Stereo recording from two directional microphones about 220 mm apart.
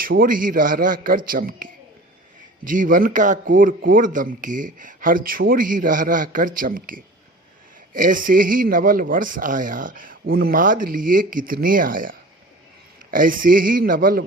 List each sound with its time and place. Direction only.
0.0 s speech: 40° right (ahead or behind)